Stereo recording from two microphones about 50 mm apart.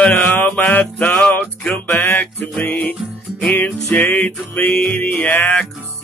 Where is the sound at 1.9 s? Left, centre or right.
Left.